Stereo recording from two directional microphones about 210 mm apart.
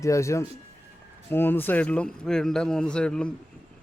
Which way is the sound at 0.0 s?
15° left (ahead or behind).